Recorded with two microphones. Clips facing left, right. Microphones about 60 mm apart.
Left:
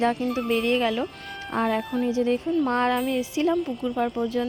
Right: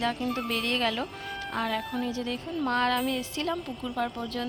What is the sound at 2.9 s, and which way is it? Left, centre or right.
Speech, centre.